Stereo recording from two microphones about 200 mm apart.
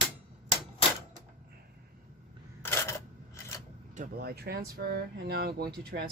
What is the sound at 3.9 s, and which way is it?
Speech, 50° right (ahead or behind).